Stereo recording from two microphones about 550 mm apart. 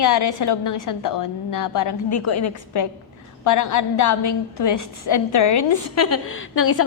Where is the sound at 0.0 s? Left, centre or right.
Left.